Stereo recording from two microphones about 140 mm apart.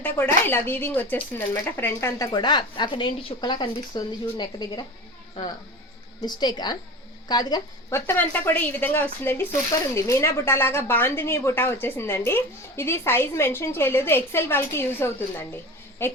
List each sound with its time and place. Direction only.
0.0 s speech: 15° left (ahead or behind); by 4.9 s 30° left (ahead or behind)
6.2 s a woman's voice: 30° left (ahead or behind)
7.9 s speech: 15° left (ahead or behind)